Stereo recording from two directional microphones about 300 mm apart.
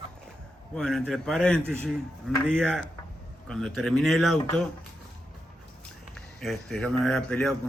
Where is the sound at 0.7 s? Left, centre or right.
Centre.